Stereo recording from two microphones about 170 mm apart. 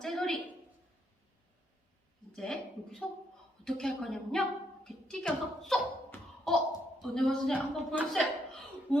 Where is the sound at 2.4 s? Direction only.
5° left (ahead or behind).